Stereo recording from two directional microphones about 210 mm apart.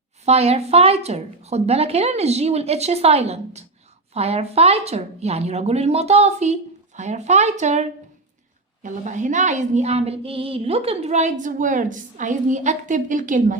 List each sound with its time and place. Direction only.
0.3 s a woman's voice: 30° right (ahead or behind)